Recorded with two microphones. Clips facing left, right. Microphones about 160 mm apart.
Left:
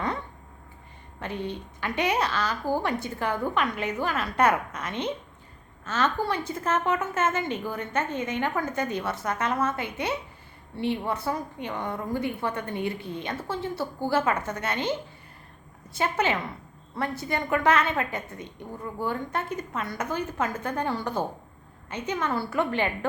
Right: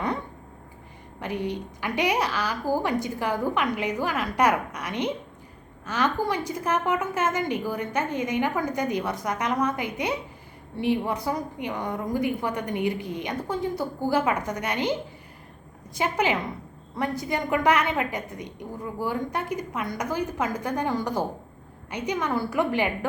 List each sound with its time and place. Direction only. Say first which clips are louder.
1.2 s a woman's voice: right 3 dB; 15° right (ahead or behind)
16.0 s a woman's voice: right 1 dB; 15° right (ahead or behind)